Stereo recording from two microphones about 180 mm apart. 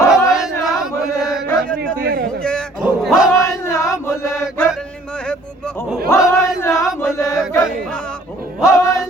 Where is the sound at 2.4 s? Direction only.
Centre (ahead or behind).